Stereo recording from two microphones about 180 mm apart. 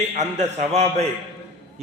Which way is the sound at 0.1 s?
40° right (ahead or behind).